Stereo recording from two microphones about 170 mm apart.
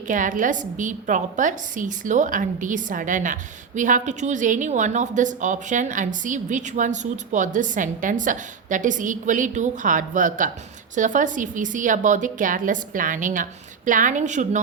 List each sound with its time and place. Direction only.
0.1 s a woman's voice: 50° right (ahead or behind)